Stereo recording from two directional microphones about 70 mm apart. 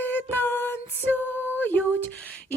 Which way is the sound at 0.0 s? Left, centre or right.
Left.